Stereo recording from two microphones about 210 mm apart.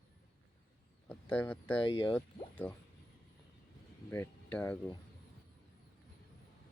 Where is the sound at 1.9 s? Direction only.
20° left (ahead or behind).